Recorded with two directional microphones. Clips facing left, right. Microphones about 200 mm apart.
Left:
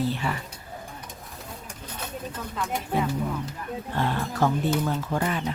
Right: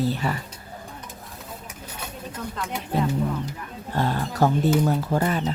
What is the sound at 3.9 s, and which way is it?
Speech, 40° right (ahead or behind).